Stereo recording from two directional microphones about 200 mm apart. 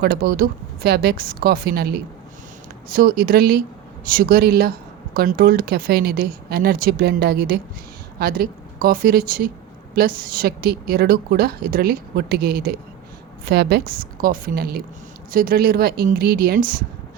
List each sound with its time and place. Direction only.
0.0 s a woman's voice: 50° right (ahead or behind)